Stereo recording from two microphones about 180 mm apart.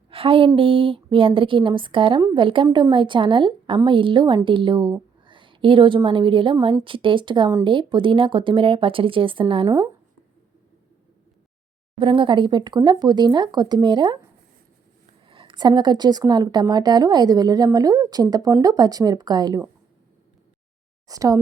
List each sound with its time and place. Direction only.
0.1 s a woman's voice: 30° right (ahead or behind)
9.6 s speech: 20° right (ahead or behind)
11.9 s a woman's voice: 30° right (ahead or behind)
15.3 s a woman's voice: 30° right (ahead or behind)
21.1 s a woman's voice: 20° right (ahead or behind)